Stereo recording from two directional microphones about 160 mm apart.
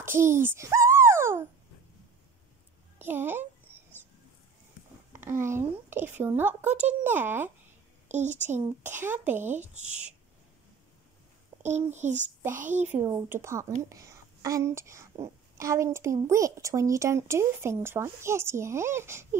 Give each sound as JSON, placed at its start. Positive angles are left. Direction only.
{"t": 0.0, "sound": "a sound", "side_deg": -15}
{"t": 3.0, "sound": "a child's voice", "side_deg": -15}
{"t": 5.1, "sound": "a woman's voice", "side_deg": -15}
{"t": 8.1, "sound": "speech", "side_deg": -50}
{"t": 8.4, "sound": "speech", "side_deg": -15}
{"t": 11.6, "sound": "a child's voice", "side_deg": -45}
{"t": 12.8, "sound": "a woman's voice", "side_deg": -15}